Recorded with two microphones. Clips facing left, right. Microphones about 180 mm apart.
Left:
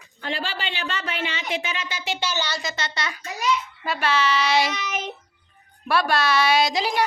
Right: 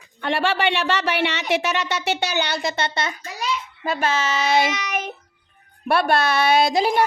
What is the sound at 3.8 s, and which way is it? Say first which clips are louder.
Speech: right 2 dB; 45° right (ahead or behind).